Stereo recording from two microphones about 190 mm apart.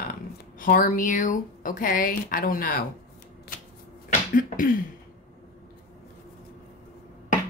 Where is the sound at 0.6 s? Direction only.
45° left (ahead or behind).